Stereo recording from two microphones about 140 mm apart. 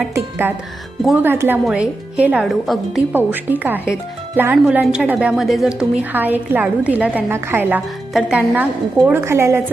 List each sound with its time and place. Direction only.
1.0 s a woman's voice: 10° right (ahead or behind)
3.1 s a woman's voice: 15° right (ahead or behind)